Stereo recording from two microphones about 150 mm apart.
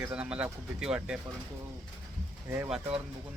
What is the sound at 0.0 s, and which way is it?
Speech, 5° right (ahead or behind).